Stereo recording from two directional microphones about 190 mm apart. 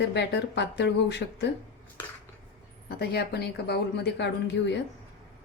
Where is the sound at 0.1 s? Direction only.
65° left (ahead or behind).